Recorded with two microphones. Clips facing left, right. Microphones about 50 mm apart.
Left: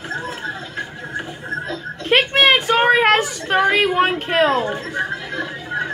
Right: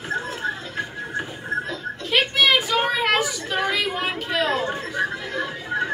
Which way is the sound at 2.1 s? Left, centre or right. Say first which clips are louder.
Left 5 dB; left.